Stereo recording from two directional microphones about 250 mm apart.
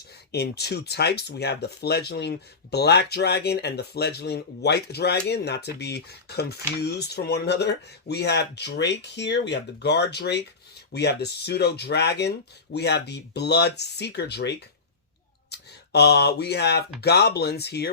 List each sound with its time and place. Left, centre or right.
0.3 s speech: left